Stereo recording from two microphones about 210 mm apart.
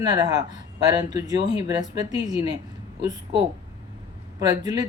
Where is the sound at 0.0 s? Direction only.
20° right (ahead or behind).